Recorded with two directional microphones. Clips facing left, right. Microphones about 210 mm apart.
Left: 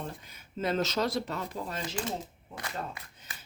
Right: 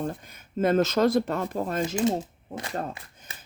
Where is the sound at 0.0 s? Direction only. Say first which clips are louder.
Right 9 dB; 50° right (ahead or behind).